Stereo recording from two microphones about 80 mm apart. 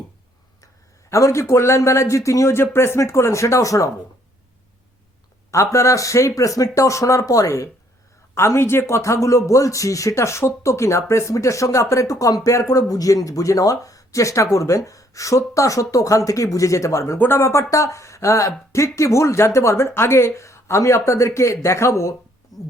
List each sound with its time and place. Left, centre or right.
1.1 s speech: left
5.5 s speech: left
22.5 s speech: left